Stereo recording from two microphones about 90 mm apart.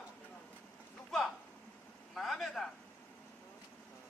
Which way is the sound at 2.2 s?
Centre (ahead or behind).